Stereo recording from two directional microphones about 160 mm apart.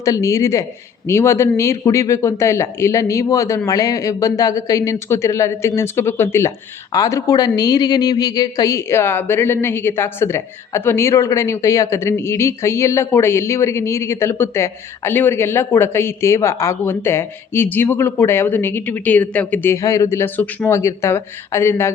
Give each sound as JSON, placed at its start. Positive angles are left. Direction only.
{"t": 0.0, "sound": "a woman's voice", "side_deg": 20}